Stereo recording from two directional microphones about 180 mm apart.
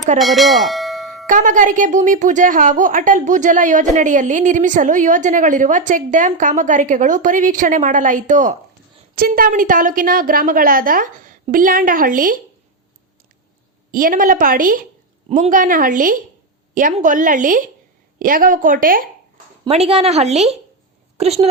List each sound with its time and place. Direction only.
0.2 s bell: centre (ahead or behind)
1.3 s speech: 45° right (ahead or behind)
13.9 s speech: 50° right (ahead or behind)
19.6 s a woman's voice: 35° right (ahead or behind)